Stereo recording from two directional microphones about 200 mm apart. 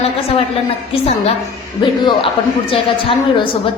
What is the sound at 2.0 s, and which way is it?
Speech, 20° left (ahead or behind).